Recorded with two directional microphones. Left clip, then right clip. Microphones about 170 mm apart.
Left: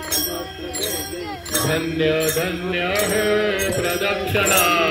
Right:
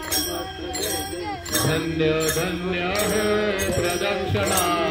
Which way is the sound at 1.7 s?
90° right.